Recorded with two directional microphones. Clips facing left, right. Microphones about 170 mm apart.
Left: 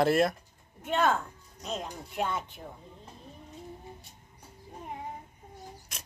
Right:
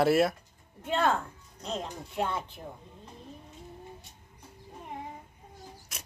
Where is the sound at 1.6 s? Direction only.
5° left (ahead or behind).